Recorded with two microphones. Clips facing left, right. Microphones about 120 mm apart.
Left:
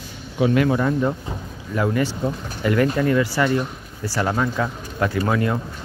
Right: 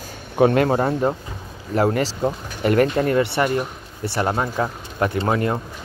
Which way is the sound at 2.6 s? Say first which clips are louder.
Right 2 dB; 50° right (ahead or behind).